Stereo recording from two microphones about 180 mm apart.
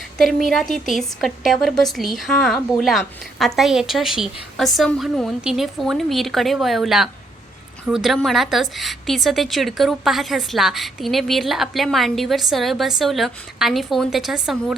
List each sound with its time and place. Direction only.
0.2 s a woman's voice: centre (ahead or behind)